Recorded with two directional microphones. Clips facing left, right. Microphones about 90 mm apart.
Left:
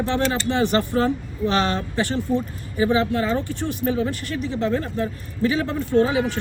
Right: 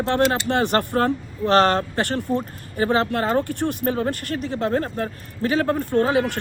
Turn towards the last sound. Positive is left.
turn(degrees=-50)  # may be behind; listen again after turning